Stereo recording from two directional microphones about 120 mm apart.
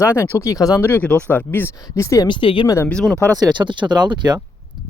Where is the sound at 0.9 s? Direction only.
15° left (ahead or behind).